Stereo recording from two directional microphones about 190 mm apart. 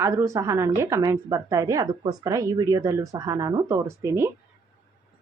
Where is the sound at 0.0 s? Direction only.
15° right (ahead or behind).